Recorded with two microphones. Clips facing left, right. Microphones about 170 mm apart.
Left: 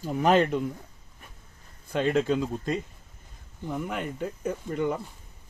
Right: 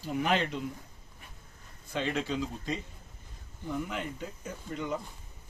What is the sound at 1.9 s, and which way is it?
Speech, 50° left (ahead or behind).